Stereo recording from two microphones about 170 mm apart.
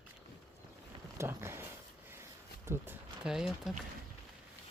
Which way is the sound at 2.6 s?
15° right (ahead or behind).